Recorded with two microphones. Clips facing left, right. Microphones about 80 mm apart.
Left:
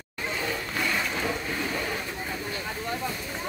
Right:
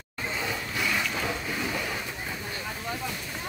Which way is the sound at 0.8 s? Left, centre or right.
Centre.